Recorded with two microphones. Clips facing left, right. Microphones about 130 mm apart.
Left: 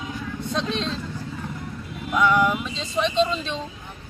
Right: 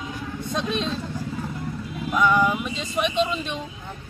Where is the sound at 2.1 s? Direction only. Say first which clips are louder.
Even; centre (ahead or behind).